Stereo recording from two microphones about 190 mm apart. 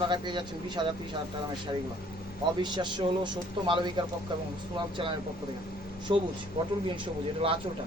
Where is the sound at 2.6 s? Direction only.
25° right (ahead or behind).